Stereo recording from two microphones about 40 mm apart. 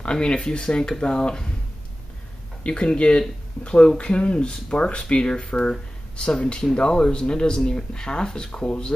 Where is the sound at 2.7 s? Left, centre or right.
Left.